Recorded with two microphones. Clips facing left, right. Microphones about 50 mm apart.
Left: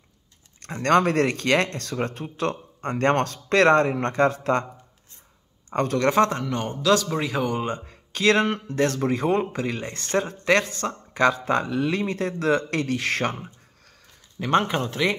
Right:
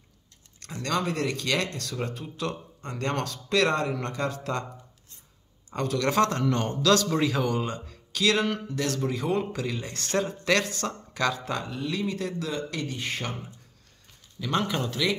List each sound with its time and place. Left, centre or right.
0.8 s speech: left
5.7 s speech: left
6.0 s speech: left
6.8 s speech: centre; by 11.6 s left
11.6 s speech: left
11.9 s speech: left
14.4 s speech: left